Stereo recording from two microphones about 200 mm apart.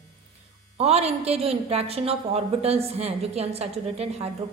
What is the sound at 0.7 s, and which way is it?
A woman's voice, 30° right (ahead or behind).